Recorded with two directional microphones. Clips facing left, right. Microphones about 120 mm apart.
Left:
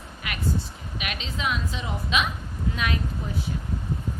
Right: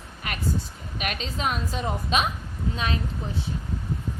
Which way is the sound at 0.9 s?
45° right (ahead or behind).